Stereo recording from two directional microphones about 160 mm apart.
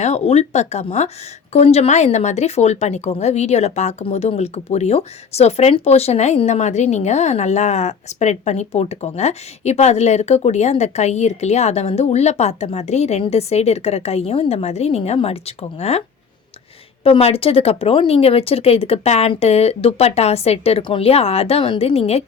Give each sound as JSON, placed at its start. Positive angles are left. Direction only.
{"t": 0.0, "sound": "a woman's voice", "side_deg": 45}